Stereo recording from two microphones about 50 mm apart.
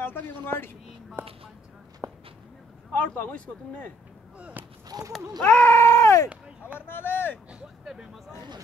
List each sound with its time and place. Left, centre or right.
0.0 s speech: left
1.2 s speech: right
2.0 s a sound: right
2.9 s speech: left
5.4 s speech: left
5.7 s groan: left
6.9 s vehicle: left
7.8 s speech: centre